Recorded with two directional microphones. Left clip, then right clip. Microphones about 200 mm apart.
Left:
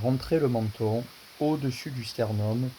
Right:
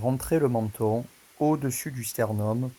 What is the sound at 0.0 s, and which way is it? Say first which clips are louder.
Speech: right 1 dB; 15° right (ahead or behind).